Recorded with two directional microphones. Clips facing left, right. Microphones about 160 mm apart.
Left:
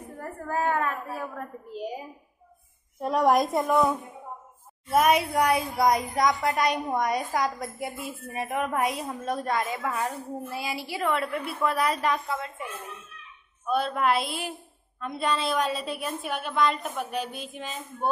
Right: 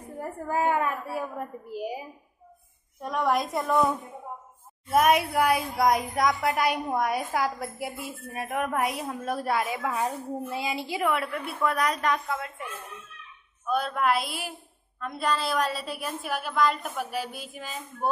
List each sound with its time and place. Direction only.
0.1 s a sound: 15° right (ahead or behind)
3.0 s a woman's voice: 35° left (ahead or behind)
3.6 s a woman's voice: centre (ahead or behind)
11.3 s a woman's voice: centre (ahead or behind)
13.7 s a woman's voice: centre (ahead or behind)